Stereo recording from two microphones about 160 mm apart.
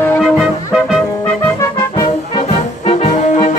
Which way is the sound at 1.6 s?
20° left (ahead or behind).